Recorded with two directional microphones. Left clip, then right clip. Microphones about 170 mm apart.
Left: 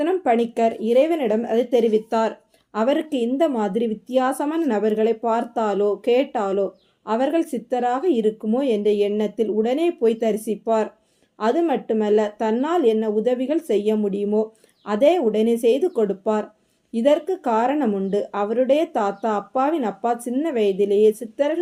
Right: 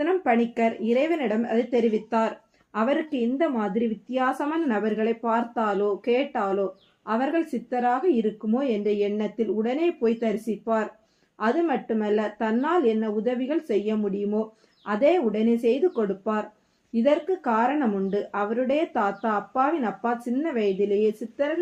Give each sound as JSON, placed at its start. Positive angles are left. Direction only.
{"t": 0.6, "sound": "speech", "side_deg": 45}